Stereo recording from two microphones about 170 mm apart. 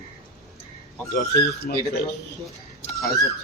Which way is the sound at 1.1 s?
65° left (ahead or behind).